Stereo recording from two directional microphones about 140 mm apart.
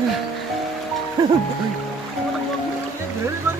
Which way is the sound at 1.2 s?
30° right (ahead or behind).